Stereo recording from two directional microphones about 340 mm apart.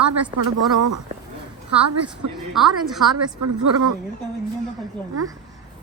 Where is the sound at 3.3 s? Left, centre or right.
Right.